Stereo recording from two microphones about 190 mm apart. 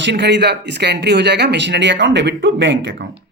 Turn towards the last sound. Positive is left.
turn(degrees=-75)  # may be behind; listen again after turning